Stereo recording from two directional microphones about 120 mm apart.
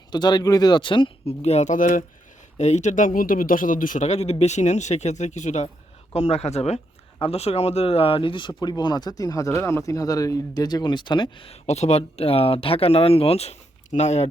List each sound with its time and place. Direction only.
0.1 s speech: 35° left (ahead or behind)
1.3 s speech: 65° left (ahead or behind); by 2.0 s 90° left
2.6 s speech: 75° left (ahead or behind)
6.1 s speech: 65° left (ahead or behind); by 11.5 s 45° left (ahead or behind)
11.6 s speech: 65° left (ahead or behind)